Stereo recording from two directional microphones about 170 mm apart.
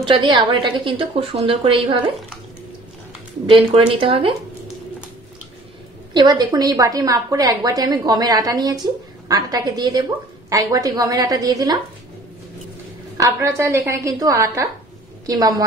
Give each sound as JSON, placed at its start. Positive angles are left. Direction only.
{"t": 0.0, "sound": "a woman's voice", "side_deg": -30}
{"t": 3.4, "sound": "speech", "side_deg": -30}
{"t": 6.1, "sound": "a woman's voice", "side_deg": -25}
{"t": 13.2, "sound": "a woman's voice", "side_deg": -20}